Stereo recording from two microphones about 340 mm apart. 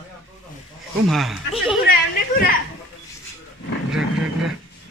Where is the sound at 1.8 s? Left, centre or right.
Left.